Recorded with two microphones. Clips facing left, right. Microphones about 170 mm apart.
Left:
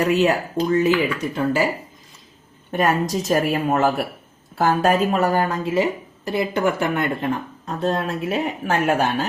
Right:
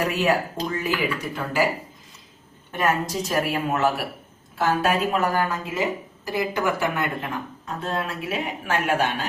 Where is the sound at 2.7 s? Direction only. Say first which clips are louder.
Left 4 dB; 45° left (ahead or behind).